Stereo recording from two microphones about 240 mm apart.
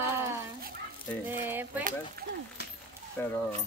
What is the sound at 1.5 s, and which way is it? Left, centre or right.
Speech, centre.